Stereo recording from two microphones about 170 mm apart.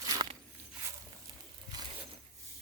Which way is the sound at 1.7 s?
25° right (ahead or behind).